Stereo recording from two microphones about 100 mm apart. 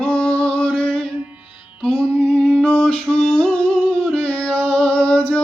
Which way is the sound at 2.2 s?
10° left (ahead or behind).